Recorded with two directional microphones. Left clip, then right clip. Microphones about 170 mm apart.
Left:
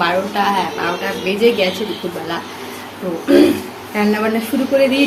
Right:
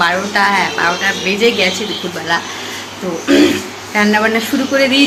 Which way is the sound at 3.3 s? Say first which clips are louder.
Even; 5° left (ahead or behind).